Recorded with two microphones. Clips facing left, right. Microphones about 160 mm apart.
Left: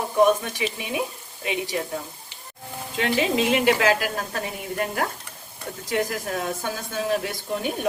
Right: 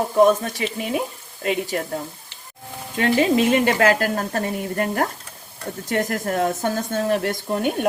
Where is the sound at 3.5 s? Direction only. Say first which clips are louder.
Right 2 dB; 45° right (ahead or behind).